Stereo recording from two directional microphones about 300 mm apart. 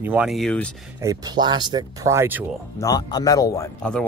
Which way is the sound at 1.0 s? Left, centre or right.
Centre.